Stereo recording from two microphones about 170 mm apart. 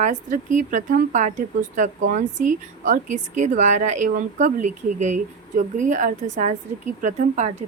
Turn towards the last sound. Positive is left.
turn(degrees=-45)  # may be behind; listen again after turning